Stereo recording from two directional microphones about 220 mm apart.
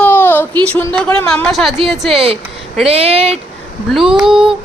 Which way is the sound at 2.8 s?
25° right (ahead or behind).